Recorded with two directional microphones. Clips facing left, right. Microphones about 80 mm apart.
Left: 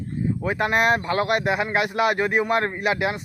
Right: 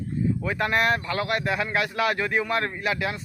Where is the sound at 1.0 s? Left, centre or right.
Left.